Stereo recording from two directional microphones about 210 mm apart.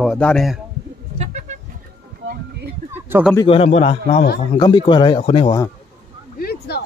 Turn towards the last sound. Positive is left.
turn(degrees=50)  # may be behind; listen again after turning